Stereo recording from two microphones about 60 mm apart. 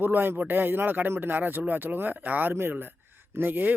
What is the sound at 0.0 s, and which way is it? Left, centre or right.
Speech, right.